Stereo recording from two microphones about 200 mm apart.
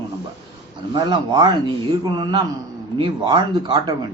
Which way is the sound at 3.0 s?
25° right (ahead or behind).